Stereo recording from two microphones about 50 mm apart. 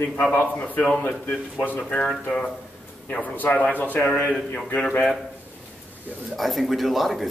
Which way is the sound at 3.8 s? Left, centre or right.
Left.